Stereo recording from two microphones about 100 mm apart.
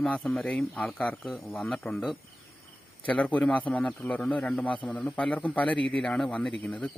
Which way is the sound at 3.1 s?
15° left (ahead or behind).